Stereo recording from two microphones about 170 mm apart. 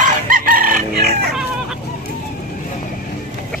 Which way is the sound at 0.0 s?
55° right (ahead or behind).